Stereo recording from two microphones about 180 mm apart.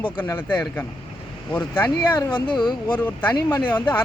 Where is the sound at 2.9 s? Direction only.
10° left (ahead or behind).